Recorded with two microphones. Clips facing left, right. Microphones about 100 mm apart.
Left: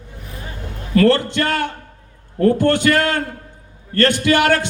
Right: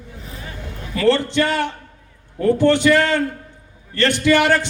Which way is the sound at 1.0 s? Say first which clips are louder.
Left 2 dB; 50° left (ahead or behind).